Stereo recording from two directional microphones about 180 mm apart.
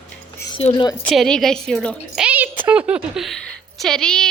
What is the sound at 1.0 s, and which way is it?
Speech, centre (ahead or behind).